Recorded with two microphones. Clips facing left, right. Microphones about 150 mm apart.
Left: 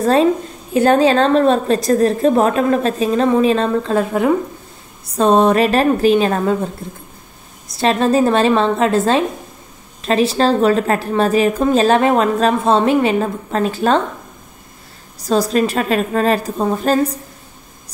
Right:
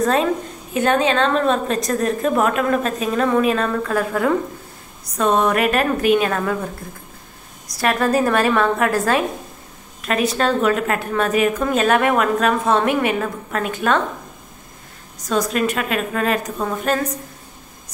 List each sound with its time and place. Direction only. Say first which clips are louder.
0.0 s a woman's voice: left 5 dB; 30° left (ahead or behind)
7.7 s a woman's voice: left 4 dB; 25° left (ahead or behind)
15.1 s a woman's voice: left 5 dB; 35° left (ahead or behind)